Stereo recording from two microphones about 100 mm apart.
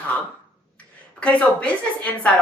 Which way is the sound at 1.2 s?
10° left (ahead or behind).